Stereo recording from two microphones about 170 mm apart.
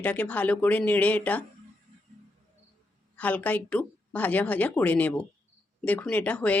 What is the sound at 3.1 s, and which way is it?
Speech, 10° left (ahead or behind).